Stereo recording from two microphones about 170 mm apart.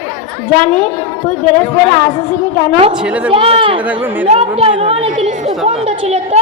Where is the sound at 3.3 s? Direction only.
35° right (ahead or behind).